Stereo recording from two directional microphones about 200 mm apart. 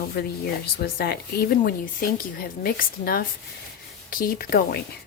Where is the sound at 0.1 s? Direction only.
50° left (ahead or behind).